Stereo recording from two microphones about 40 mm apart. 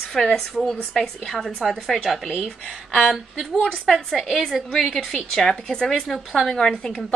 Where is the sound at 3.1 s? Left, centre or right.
Centre.